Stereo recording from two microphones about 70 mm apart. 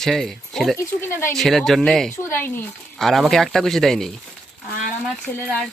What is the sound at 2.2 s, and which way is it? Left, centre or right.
Speech, left.